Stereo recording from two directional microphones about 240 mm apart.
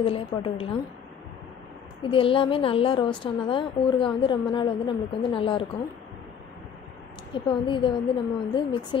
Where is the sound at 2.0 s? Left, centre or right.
Left.